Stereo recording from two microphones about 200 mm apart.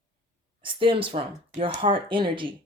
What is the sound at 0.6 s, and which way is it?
Speech, 25° right (ahead or behind).